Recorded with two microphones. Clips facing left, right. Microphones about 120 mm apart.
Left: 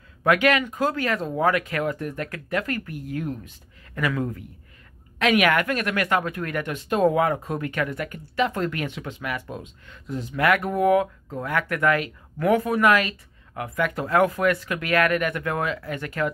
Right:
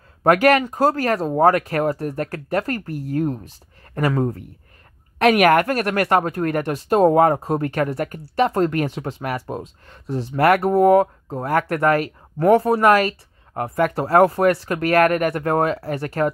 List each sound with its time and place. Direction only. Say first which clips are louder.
0.2 s speech: right 5 dB; 40° right (ahead or behind)